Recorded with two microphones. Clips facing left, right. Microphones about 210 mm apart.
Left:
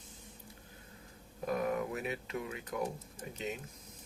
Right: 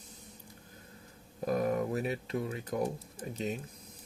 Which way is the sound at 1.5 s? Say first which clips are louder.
Right 4 dB; 35° right (ahead or behind).